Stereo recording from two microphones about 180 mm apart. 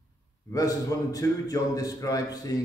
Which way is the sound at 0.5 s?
20° left (ahead or behind).